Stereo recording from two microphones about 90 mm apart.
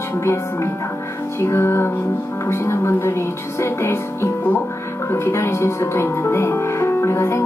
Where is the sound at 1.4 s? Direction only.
30° left (ahead or behind).